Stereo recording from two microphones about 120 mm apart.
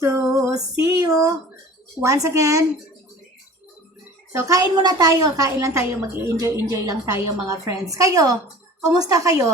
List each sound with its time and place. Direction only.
0.0 s female singing: 25° right (ahead or behind)
2.0 s a woman's voice: 25° right (ahead or behind)
4.3 s a child's voice: 25° right (ahead or behind)